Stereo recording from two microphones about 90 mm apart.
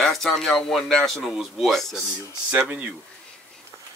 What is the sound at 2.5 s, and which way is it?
Speech, 15° right (ahead or behind).